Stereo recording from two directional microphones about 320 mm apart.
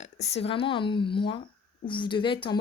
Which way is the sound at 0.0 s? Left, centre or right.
Centre.